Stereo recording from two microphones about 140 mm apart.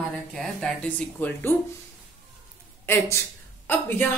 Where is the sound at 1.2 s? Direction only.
10° left (ahead or behind).